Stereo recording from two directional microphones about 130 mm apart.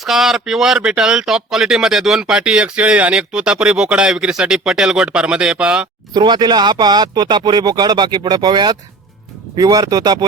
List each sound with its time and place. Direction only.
0.0 s speech: centre (ahead or behind)
6.1 s speech: 35° right (ahead or behind)